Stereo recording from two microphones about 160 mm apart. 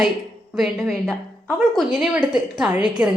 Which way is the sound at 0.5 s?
Centre (ahead or behind).